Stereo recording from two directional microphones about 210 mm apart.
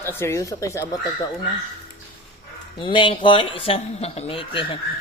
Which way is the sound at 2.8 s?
25° left (ahead or behind).